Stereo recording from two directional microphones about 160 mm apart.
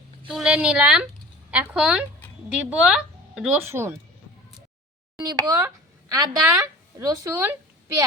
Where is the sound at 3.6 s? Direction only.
15° right (ahead or behind).